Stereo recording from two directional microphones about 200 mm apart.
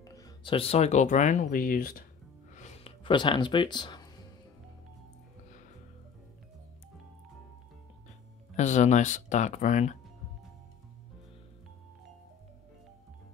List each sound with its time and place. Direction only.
0.0 s speech: 15° left (ahead or behind); by 2.0 s 45° left (ahead or behind)
2.5 s music: 35° left (ahead or behind)
3.0 s speech: 25° left (ahead or behind)
8.5 s speech: 35° left (ahead or behind)